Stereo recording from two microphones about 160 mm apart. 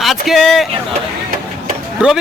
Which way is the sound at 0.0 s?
Centre (ahead or behind).